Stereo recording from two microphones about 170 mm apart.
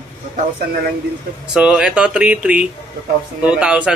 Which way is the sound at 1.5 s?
5° right (ahead or behind).